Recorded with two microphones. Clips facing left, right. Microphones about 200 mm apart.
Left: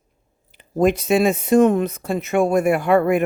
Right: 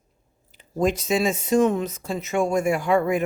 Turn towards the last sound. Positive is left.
turn(degrees=60)  # may be behind; listen again after turning